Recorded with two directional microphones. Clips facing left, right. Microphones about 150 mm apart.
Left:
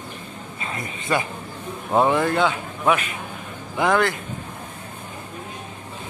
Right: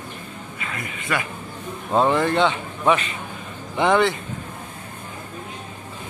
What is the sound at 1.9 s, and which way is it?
Speech, 10° left (ahead or behind).